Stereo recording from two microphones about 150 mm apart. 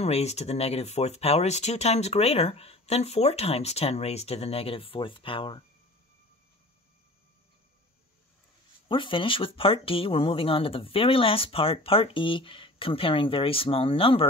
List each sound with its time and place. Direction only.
0.0 s speech: 45° left (ahead or behind)
8.8 s speech: 35° left (ahead or behind)